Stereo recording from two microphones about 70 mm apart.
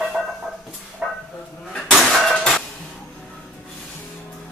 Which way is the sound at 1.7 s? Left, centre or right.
Centre.